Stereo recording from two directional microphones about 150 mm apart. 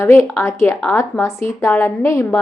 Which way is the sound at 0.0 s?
15° left (ahead or behind).